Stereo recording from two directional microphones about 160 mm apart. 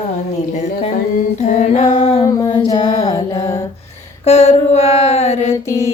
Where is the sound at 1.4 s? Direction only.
45° left (ahead or behind).